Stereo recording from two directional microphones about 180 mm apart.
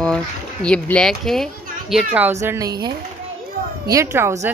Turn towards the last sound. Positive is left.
turn(degrees=-15)  # may be behind; listen again after turning